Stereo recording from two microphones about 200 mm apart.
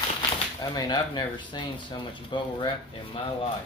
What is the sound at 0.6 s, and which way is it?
Speech, 20° left (ahead or behind).